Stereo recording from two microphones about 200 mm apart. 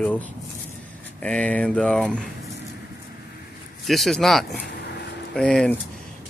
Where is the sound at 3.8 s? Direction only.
Centre (ahead or behind).